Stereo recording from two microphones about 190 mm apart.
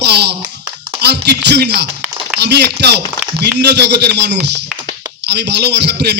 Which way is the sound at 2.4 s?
60° right (ahead or behind).